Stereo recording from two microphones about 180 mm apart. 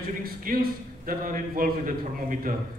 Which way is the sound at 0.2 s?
55° right (ahead or behind).